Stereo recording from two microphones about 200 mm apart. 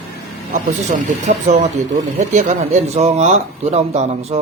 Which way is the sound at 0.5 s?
40° right (ahead or behind).